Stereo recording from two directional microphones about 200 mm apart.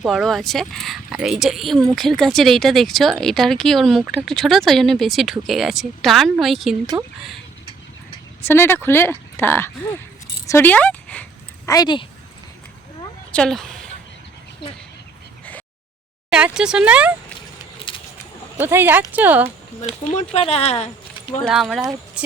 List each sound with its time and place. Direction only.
0.0 s speech: centre (ahead or behind)
8.4 s speech: 10° left (ahead or behind)
10.4 s a sound: 10° left (ahead or behind)
13.3 s speech: 5° left (ahead or behind)
14.6 s speech: 55° left (ahead or behind)
16.3 s speech: 5° right (ahead or behind)
17.9 s a sound: 25° left (ahead or behind)
18.5 s speech: 10° right (ahead or behind)
20.3 s speech: 30° left (ahead or behind)
21.4 s speech: centre (ahead or behind)